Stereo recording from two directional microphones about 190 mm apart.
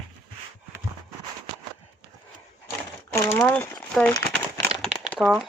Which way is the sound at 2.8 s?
15° left (ahead or behind).